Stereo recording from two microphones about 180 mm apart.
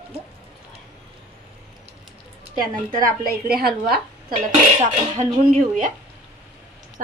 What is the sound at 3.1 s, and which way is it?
A woman's voice, 55° right (ahead or behind).